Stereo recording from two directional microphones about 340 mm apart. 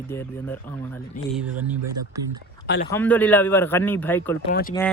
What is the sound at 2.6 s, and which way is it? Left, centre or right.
Speech, left.